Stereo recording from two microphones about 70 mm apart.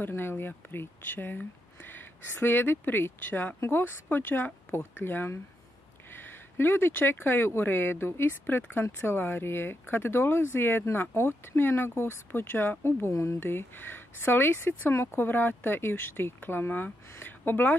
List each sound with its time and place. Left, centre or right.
0.0 s speech: left
13.4 s speech: left
15.0 s speech: left
15.2 s speech: left